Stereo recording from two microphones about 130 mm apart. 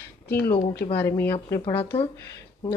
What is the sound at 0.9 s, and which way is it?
Speech, 15° left (ahead or behind).